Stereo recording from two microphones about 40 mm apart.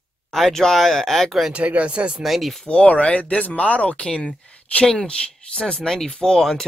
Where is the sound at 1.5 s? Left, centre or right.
Right.